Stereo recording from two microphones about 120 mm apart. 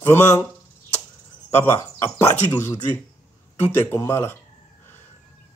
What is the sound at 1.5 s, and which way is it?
Speech, 20° left (ahead or behind).